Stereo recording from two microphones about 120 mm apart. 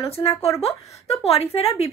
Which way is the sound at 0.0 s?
55° left (ahead or behind).